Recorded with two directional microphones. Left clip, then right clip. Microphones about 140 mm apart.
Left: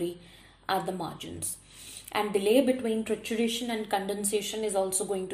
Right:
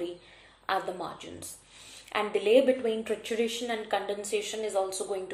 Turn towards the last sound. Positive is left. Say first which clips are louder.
# left 2 dB
turn(degrees=35)  # may be behind; listen again after turning